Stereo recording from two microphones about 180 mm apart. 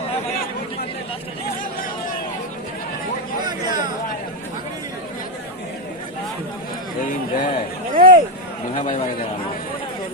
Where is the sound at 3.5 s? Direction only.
25° right (ahead or behind).